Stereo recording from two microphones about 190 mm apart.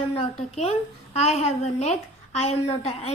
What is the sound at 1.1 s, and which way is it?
A woman's voice, 35° left (ahead or behind).